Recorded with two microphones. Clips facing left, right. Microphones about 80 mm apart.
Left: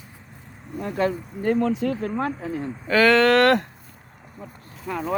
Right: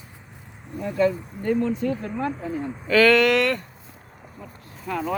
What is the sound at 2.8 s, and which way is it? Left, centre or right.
Speech, left.